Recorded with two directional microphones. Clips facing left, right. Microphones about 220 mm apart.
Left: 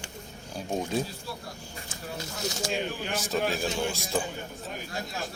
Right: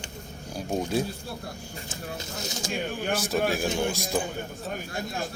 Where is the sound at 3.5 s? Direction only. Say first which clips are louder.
Right 3 dB; 15° right (ahead or behind).